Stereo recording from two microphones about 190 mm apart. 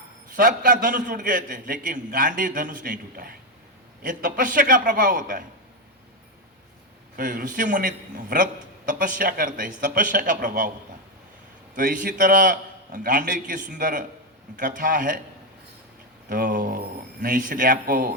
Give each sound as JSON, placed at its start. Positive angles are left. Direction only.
{"t": 0.3, "sound": "a man's voice", "side_deg": -45}
{"t": 7.2, "sound": "a man's voice", "side_deg": -45}
{"t": 11.8, "sound": "a man's voice", "side_deg": -45}
{"t": 16.3, "sound": "a sound", "side_deg": -45}
{"t": 17.2, "sound": "a man's voice", "side_deg": -45}